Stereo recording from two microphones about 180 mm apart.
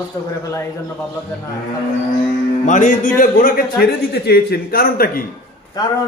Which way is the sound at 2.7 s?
45° left (ahead or behind).